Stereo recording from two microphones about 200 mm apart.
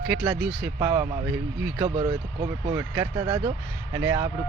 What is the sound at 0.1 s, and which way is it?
Speech, 5° right (ahead or behind).